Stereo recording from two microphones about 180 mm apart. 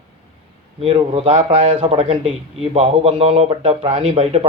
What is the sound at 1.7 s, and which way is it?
A man's voice, 30° right (ahead or behind).